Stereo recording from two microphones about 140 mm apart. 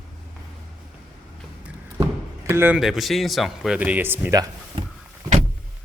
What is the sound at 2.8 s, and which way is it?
Speech, centre (ahead or behind).